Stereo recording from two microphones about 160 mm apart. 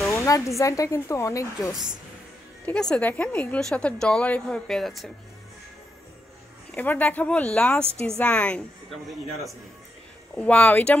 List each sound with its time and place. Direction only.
0.1 s speech: 20° left (ahead or behind)
2.6 s a woman's voice: 5° left (ahead or behind)
6.7 s a woman's voice: 10° left (ahead or behind)